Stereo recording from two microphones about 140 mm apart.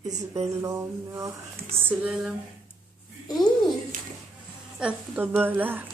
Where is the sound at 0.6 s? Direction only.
20° right (ahead or behind).